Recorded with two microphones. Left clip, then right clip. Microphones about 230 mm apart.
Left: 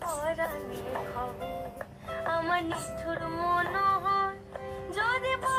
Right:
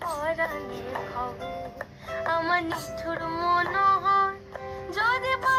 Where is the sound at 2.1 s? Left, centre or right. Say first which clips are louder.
Right 4 dB; right.